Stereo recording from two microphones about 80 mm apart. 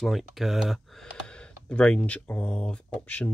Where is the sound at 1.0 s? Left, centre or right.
Centre.